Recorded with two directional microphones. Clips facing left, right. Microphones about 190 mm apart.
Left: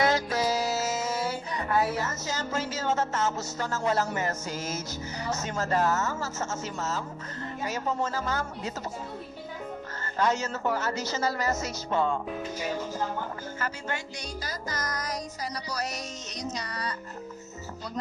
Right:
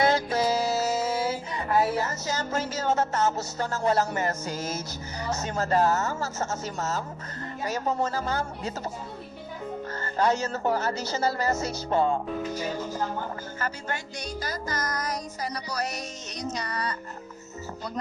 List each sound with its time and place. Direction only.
0.0 s music: 30° right (ahead or behind)
5.3 s speech: 35° right (ahead or behind)
10.0 s speech: 35° right (ahead or behind)
13.6 s speech: 40° right (ahead or behind)
14.4 s music: 50° right (ahead or behind)